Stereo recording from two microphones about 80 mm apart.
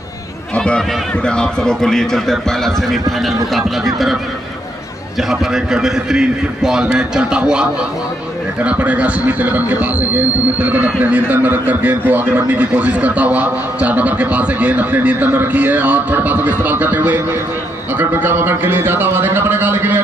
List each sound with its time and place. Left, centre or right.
0.6 s a man's voice: centre
5.3 s a man's voice: centre; by 20.0 s right